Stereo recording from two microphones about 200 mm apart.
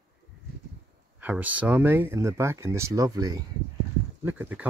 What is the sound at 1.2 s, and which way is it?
Speech, 10° right (ahead or behind).